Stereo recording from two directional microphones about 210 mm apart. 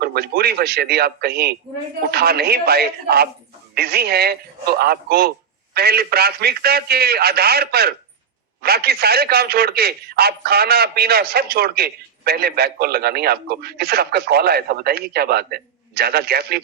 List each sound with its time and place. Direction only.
0.0 s a man's voice: 50° right (ahead or behind)